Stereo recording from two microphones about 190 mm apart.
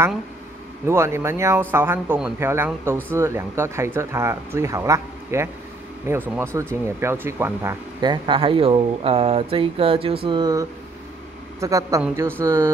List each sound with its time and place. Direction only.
0.8 s speech: 15° right (ahead or behind)